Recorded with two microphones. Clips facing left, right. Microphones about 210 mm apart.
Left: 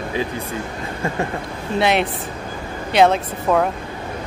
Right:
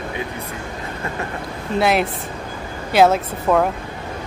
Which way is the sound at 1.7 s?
Centre (ahead or behind).